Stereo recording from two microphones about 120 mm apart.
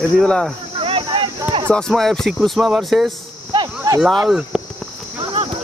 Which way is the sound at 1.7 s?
5° left (ahead or behind).